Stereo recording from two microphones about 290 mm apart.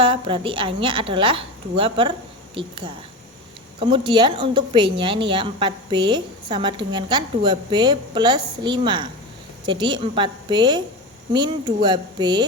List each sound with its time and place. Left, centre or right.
0.0 s a woman's voice: centre